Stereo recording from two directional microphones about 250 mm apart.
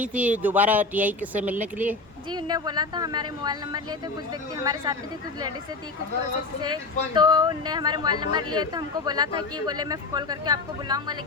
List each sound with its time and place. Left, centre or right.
0.0 s speech: centre
2.3 s speech: centre
6.6 s speech: centre